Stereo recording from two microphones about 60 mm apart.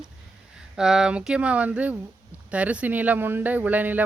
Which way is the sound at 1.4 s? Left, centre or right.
Right.